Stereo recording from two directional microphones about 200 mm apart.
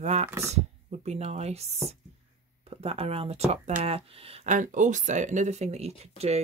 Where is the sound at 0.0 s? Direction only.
35° right (ahead or behind).